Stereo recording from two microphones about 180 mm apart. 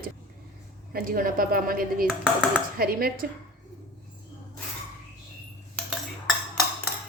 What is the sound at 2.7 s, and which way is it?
Speech, 55° right (ahead or behind).